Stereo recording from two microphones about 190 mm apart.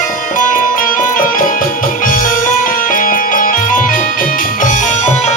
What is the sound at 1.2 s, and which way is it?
Music, 45° left (ahead or behind).